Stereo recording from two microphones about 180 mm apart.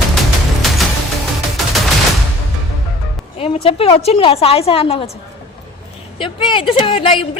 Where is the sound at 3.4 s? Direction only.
30° left (ahead or behind).